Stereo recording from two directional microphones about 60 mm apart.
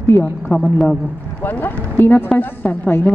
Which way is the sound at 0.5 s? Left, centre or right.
Left.